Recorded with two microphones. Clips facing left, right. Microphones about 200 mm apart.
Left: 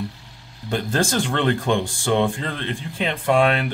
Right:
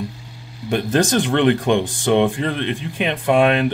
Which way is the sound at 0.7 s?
15° right (ahead or behind).